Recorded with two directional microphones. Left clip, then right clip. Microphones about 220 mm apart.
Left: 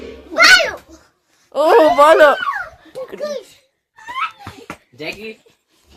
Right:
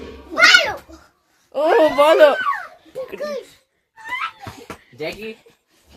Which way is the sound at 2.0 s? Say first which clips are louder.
Left 1 dB; 10° left (ahead or behind).